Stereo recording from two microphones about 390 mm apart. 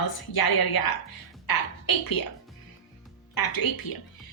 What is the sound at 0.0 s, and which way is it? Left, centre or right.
A woman's voice, left.